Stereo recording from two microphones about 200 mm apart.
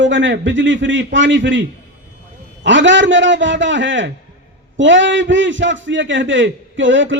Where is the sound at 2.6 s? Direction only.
65° right (ahead or behind).